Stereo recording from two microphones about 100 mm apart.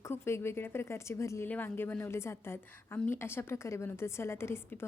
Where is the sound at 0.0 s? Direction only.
25° left (ahead or behind).